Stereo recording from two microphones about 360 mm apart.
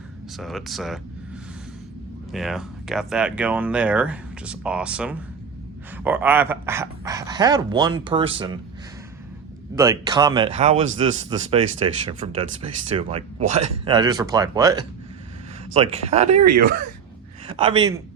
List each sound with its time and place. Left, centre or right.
0.3 s speech: centre
2.3 s speech: centre
9.7 s speech: centre
13.4 s speech: right
13.8 s speech: centre
17.4 s a man's voice: centre